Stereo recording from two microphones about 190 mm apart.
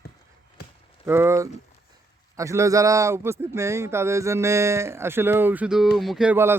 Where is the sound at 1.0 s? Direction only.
10° right (ahead or behind).